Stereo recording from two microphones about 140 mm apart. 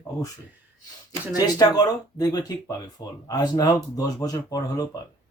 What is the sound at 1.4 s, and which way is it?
Speech, 30° left (ahead or behind).